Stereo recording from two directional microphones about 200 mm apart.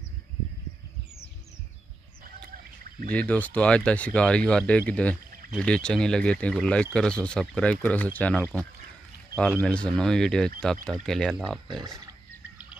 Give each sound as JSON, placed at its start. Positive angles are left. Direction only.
{"t": 3.1, "sound": "speech", "side_deg": 5}
{"t": 11.8, "sound": "wild animals", "side_deg": -15}